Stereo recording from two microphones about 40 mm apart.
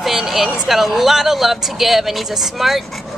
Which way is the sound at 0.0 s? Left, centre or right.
Centre.